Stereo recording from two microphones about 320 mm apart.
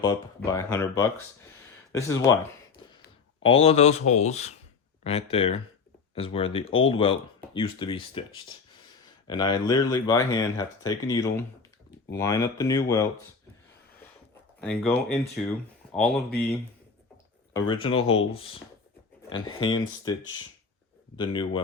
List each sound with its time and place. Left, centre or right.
0.0 s speech: centre
3.4 s speech: centre
14.6 s speech: centre
17.5 s speech: centre
21.2 s speech: centre